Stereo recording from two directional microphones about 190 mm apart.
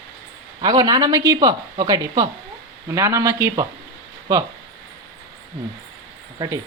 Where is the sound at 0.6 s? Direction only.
20° right (ahead or behind).